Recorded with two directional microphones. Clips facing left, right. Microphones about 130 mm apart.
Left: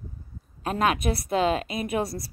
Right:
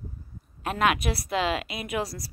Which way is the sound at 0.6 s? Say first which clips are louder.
Left 1 dB; 35° left (ahead or behind).